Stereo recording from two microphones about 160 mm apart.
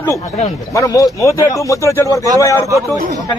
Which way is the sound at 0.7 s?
20° left (ahead or behind).